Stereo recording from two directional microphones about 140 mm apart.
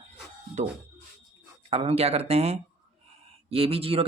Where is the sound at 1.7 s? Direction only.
45° right (ahead or behind).